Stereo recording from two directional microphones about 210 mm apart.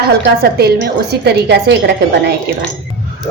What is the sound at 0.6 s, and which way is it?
A woman's voice, 50° right (ahead or behind).